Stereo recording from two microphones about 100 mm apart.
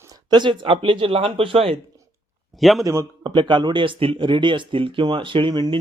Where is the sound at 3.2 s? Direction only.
55° right (ahead or behind).